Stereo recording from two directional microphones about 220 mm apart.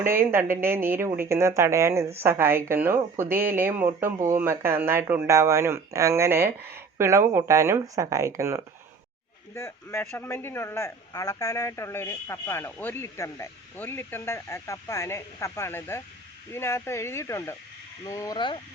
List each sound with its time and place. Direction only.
0.0 s speech: 10° right (ahead or behind)
9.6 s a man's voice: 10° left (ahead or behind)